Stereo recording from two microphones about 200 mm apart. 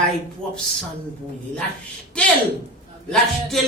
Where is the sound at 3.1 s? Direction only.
Centre (ahead or behind).